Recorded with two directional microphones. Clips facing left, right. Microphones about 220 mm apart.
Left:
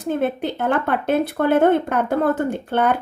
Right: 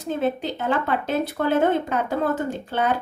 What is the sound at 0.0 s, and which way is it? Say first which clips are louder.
Speech: left 3 dB; 55° left (ahead or behind).